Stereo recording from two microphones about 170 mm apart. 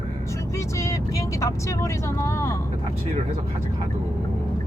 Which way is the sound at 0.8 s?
15° left (ahead or behind).